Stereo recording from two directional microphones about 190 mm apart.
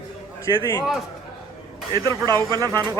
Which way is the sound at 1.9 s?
20° right (ahead or behind).